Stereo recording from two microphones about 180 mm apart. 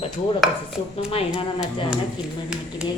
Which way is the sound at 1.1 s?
30° left (ahead or behind).